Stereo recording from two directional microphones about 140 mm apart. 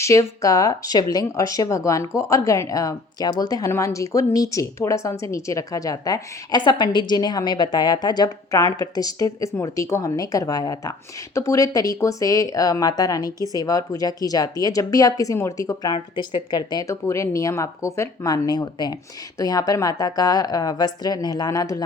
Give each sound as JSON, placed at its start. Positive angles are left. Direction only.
{"t": 0.0, "sound": "speech", "side_deg": 20}